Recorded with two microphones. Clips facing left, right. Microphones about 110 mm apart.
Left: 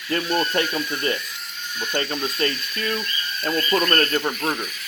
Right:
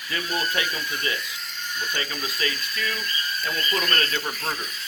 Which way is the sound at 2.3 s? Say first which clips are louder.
Left 4 dB; 40° left (ahead or behind).